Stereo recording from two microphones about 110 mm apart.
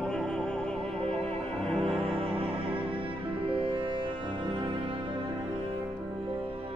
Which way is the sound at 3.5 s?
50° right (ahead or behind).